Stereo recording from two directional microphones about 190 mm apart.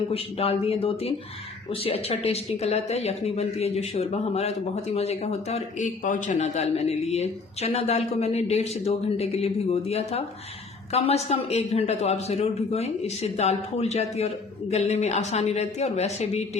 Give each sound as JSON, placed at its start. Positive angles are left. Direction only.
{"t": 0.1, "sound": "speech", "side_deg": 30}